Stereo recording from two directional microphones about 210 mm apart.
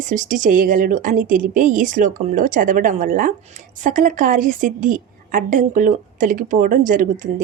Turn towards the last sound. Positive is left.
turn(degrees=-40)  # may be behind; listen again after turning